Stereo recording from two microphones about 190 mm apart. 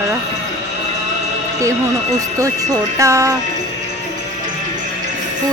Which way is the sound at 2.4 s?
15° right (ahead or behind).